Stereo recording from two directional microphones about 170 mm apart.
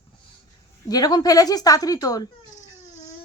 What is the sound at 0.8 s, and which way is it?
Speech, 20° left (ahead or behind).